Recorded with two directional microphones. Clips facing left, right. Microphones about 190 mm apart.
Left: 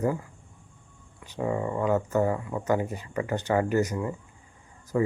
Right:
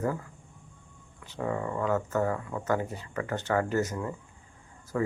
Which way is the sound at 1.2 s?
15° left (ahead or behind).